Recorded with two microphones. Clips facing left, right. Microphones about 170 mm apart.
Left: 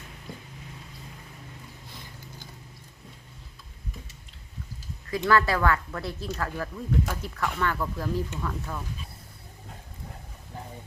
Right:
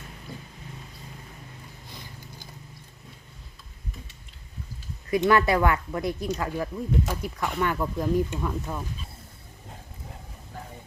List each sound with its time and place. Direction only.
5.1 s speech: 20° right (ahead or behind)